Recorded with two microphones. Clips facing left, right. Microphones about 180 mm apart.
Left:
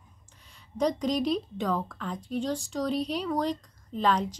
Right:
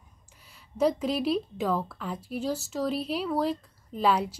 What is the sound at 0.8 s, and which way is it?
A woman's voice, 5° right (ahead or behind).